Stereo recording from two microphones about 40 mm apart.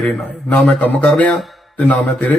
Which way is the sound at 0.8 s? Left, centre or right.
Left.